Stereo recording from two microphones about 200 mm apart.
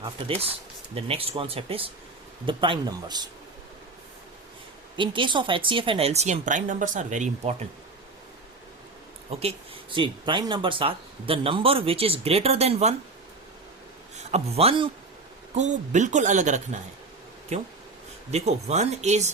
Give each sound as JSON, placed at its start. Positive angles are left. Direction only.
{"t": 0.9, "sound": "speech", "side_deg": -30}
{"t": 4.9, "sound": "a woman's voice", "side_deg": -25}
{"t": 9.9, "sound": "speech", "side_deg": -25}
{"t": 14.2, "sound": "a man's voice", "side_deg": -35}